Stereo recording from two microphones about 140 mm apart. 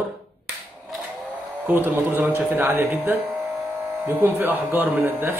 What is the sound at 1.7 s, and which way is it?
Speech, 15° right (ahead or behind).